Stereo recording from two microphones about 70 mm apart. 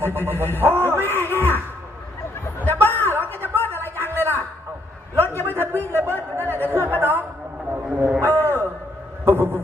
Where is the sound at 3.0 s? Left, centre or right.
Right.